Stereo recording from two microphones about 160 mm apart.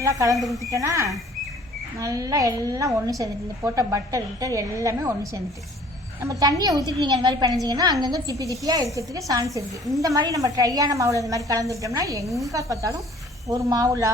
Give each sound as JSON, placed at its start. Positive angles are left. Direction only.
{"t": 0.0, "sound": "a woman's voice", "side_deg": -20}
{"t": 0.3, "sound": "speech", "side_deg": 0}
{"t": 0.6, "sound": "a woman's voice", "side_deg": -20}
{"t": 12.2, "sound": "speech", "side_deg": 0}
{"t": 12.5, "sound": "a woman's voice", "side_deg": -20}